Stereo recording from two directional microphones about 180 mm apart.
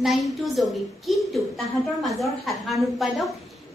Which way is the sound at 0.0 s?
Centre (ahead or behind).